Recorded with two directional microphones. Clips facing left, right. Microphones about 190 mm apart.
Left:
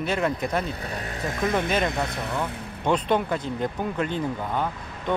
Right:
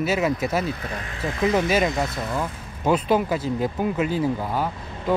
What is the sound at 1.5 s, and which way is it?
Speech, 5° right (ahead or behind).